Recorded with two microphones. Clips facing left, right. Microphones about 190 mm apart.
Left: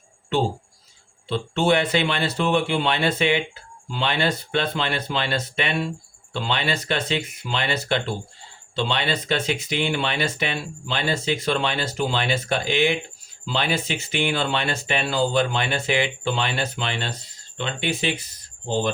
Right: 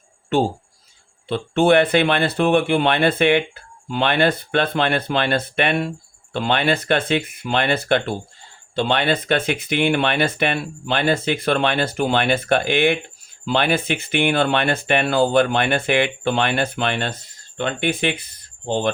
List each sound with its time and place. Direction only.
1.3 s speech: 55° right (ahead or behind)